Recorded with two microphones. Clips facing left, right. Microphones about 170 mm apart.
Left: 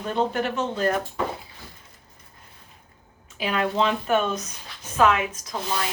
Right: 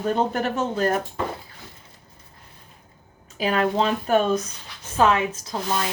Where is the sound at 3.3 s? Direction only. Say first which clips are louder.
Right 3 dB; 40° right (ahead or behind).